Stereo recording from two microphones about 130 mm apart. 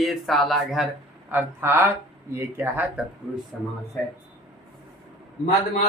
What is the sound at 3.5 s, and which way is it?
Speech, 5° left (ahead or behind).